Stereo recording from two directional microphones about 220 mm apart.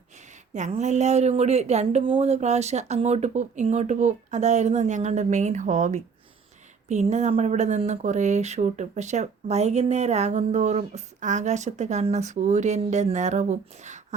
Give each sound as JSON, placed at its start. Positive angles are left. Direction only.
{"t": 0.5, "sound": "speech", "side_deg": -35}